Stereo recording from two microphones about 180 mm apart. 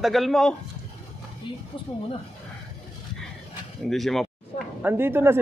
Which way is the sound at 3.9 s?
Centre (ahead or behind).